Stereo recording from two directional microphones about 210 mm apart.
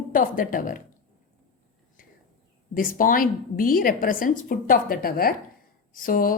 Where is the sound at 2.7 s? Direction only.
40° left (ahead or behind).